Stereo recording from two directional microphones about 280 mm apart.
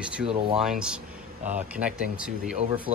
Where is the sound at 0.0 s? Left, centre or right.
Centre.